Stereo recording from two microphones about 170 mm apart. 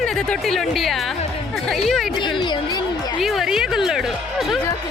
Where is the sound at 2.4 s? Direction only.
25° left (ahead or behind).